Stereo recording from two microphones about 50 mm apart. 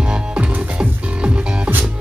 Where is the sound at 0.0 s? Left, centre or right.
Centre.